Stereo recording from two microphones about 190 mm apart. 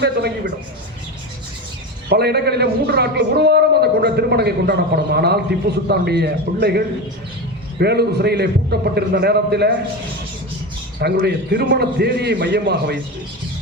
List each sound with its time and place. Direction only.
2.0 s a woman's voice: 60° right (ahead or behind)
11.0 s a woman's voice: 60° right (ahead or behind)